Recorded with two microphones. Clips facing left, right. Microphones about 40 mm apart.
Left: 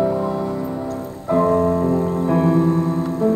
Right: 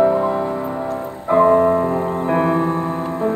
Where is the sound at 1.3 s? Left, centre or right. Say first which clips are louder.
Right 4 dB; right.